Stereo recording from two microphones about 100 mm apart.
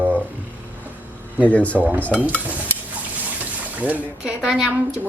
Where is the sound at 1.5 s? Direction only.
15° left (ahead or behind).